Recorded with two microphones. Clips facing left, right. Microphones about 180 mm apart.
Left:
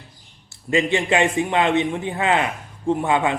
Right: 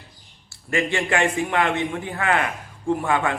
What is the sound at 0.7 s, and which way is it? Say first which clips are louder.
Speech: left 3 dB; 20° left (ahead or behind).